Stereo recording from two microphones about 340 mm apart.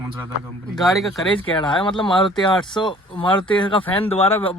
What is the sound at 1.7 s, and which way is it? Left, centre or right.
Speech, centre.